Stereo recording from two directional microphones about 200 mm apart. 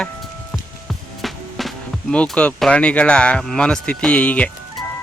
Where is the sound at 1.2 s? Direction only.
Centre (ahead or behind).